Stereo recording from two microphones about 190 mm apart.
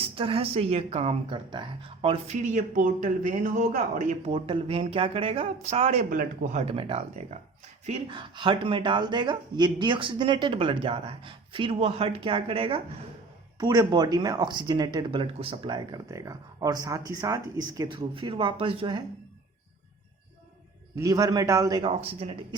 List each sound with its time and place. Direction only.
0.0 s a woman's voice: 30° right (ahead or behind); by 4.0 s 45° right (ahead or behind)
4.3 s a woman's voice: 25° right (ahead or behind)
20.9 s speech: 20° right (ahead or behind)